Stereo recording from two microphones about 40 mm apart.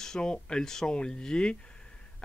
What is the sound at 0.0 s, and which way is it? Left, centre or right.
Speech, centre.